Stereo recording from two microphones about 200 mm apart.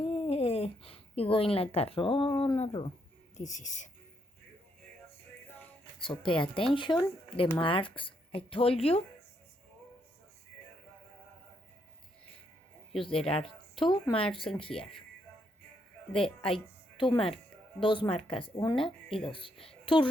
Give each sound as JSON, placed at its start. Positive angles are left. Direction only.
{"t": 0.0, "sound": "speech", "side_deg": 30}
{"t": 6.0, "sound": "speech", "side_deg": 25}
{"t": 13.1, "sound": "speech", "side_deg": 30}
{"t": 16.2, "sound": "speech", "side_deg": 25}